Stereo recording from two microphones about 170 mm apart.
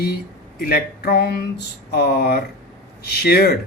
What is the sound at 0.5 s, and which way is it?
A man's voice, 60° left (ahead or behind).